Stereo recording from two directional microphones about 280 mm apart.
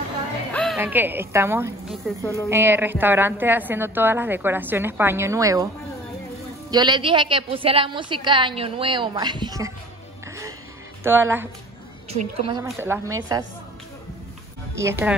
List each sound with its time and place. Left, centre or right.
0.5 s music: centre
0.7 s a woman's voice: centre
6.7 s a woman's voice: centre
11.1 s a woman's voice: centre
12.1 s a woman's voice: right
12.6 s a woman's voice: centre
14.8 s a woman's voice: centre